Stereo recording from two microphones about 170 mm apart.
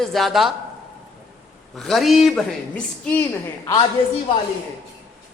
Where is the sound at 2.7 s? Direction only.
10° left (ahead or behind).